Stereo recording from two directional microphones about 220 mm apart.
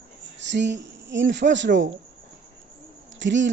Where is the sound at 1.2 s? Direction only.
55° right (ahead or behind).